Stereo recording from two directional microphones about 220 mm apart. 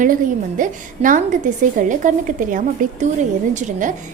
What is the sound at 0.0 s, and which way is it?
A woman's voice, 35° right (ahead or behind).